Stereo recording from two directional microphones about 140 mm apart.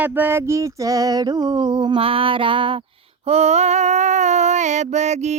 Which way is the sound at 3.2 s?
50° right (ahead or behind).